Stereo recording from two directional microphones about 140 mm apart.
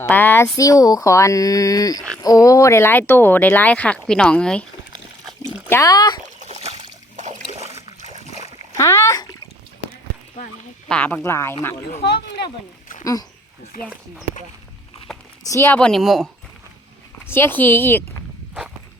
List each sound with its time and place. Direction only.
0.0 s speech: 15° left (ahead or behind)
5.6 s speech: 15° left (ahead or behind)
5.9 s speech: 30° left (ahead or behind)
6.4 s a sound: 50° right (ahead or behind)
8.8 s speech: 20° left (ahead or behind)
10.8 s speech: 10° left (ahead or behind)
15.4 s speech: 20° left (ahead or behind)
15.7 s speech: 5° left (ahead or behind)
17.2 s speech: 15° left (ahead or behind)